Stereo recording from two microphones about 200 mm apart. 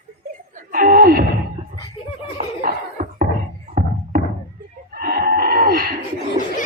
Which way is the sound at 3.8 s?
50° right (ahead or behind).